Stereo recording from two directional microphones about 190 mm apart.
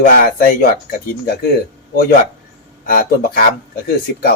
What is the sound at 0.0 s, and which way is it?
Speech, 50° left (ahead or behind).